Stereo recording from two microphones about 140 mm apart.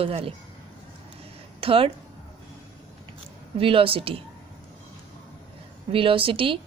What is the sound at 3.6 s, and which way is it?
Speech, 40° right (ahead or behind).